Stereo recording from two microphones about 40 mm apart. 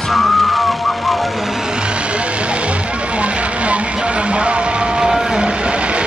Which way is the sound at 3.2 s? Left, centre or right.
Right.